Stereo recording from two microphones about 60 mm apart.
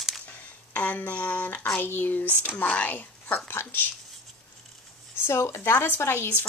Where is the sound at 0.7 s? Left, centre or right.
Left.